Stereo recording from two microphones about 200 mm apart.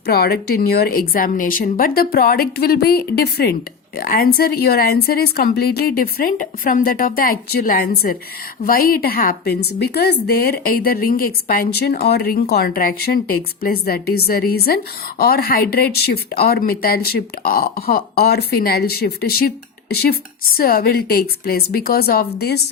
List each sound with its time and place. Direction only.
0.0 s a woman's voice: 50° left (ahead or behind)